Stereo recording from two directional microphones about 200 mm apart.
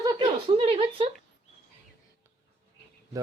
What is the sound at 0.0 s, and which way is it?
A woman's voice, 20° right (ahead or behind).